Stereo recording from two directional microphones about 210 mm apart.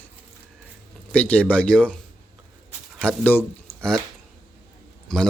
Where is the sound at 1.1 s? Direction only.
5° left (ahead or behind).